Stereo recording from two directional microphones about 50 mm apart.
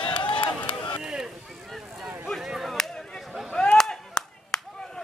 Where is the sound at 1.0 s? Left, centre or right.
Centre.